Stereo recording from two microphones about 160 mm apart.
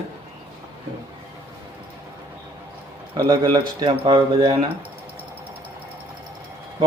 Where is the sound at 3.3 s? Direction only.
30° right (ahead or behind).